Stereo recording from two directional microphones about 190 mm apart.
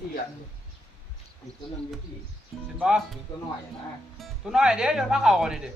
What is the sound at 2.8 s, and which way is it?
Speech, 5° right (ahead or behind).